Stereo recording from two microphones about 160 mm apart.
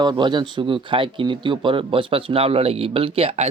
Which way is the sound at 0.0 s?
25° right (ahead or behind).